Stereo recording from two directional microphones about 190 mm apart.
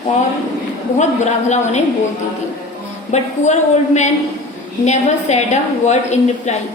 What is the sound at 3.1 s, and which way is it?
Speech, 35° left (ahead or behind).